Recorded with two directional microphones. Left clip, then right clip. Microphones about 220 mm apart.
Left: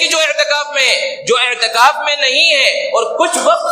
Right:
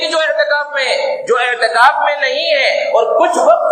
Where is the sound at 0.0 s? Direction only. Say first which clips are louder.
Left 1 dB; 50° left (ahead or behind).